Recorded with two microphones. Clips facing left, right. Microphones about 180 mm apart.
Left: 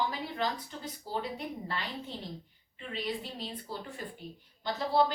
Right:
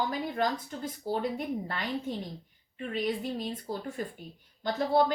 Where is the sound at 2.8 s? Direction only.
50° right (ahead or behind).